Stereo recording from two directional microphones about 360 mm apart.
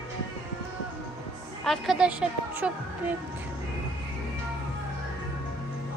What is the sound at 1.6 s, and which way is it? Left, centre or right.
A woman's voice, centre.